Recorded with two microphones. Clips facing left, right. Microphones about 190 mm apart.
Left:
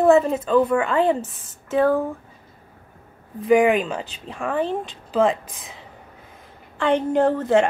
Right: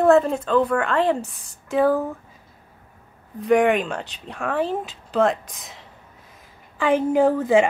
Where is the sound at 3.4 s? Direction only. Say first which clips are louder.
Left 1 dB; centre (ahead or behind).